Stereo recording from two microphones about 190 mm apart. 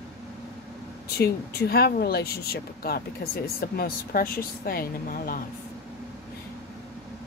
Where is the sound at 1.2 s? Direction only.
55° left (ahead or behind).